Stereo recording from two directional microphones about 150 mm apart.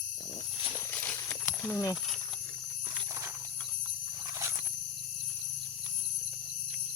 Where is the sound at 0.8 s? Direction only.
15° left (ahead or behind).